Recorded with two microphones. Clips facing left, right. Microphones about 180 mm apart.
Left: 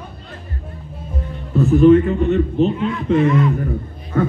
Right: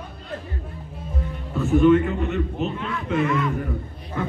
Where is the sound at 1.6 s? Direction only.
35° left (ahead or behind).